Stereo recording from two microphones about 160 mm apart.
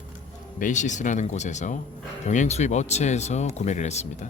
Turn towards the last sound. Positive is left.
turn(degrees=45)  # may be behind; listen again after turning